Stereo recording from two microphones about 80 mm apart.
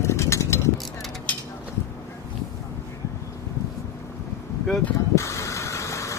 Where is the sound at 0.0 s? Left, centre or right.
Left.